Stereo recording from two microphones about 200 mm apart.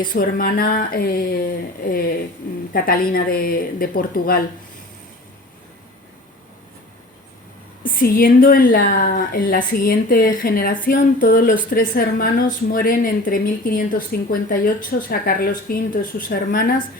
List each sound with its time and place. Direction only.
0.1 s a woman's voice: 45° left (ahead or behind)
7.9 s a woman's voice: 45° left (ahead or behind)